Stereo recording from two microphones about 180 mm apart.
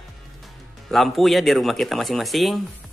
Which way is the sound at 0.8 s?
Centre (ahead or behind).